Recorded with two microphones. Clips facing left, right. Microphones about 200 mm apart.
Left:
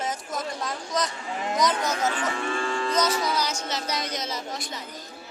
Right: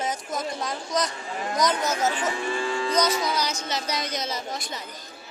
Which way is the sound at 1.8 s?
25° right (ahead or behind).